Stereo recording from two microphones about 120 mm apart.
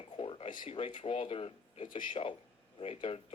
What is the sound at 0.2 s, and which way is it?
A man's voice, 50° left (ahead or behind).